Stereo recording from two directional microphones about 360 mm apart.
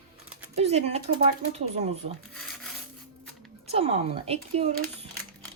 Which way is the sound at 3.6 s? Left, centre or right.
Centre.